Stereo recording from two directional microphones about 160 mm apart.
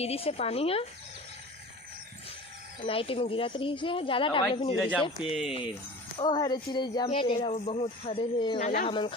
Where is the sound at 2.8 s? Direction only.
35° left (ahead or behind).